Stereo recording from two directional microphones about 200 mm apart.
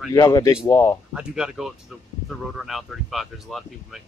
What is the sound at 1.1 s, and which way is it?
Speech, 5° right (ahead or behind).